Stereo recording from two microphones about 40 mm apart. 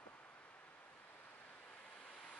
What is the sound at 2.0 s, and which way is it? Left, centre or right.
Vehicle, left.